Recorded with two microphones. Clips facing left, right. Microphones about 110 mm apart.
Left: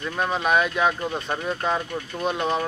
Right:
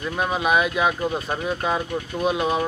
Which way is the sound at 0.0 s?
5° right (ahead or behind).